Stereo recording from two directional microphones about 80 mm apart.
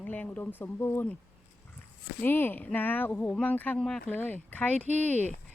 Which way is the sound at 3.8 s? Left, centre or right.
Centre.